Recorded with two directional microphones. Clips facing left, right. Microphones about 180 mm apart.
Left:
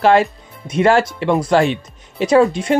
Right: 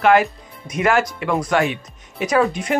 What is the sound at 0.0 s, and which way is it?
Speech, 30° left (ahead or behind).